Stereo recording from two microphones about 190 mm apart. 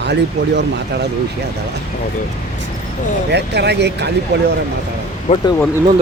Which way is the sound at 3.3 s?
60° right (ahead or behind).